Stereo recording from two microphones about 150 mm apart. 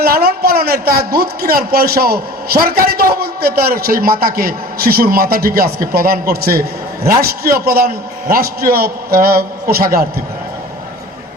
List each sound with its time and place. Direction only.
0.0 s speech: 90° right